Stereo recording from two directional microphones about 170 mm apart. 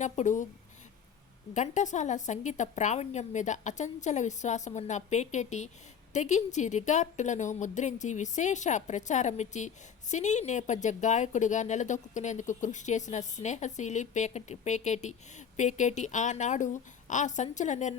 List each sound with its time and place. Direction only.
0.0 s a woman's voice: 45° left (ahead or behind)
1.5 s a woman's voice: 45° left (ahead or behind)